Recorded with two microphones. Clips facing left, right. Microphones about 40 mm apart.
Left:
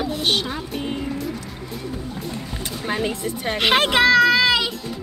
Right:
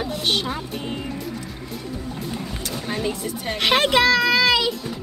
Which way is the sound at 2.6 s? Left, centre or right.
Centre.